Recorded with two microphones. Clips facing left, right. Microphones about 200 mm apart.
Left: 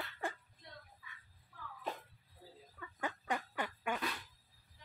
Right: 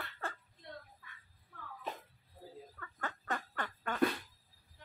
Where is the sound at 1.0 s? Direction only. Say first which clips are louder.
Even; 55° right (ahead or behind).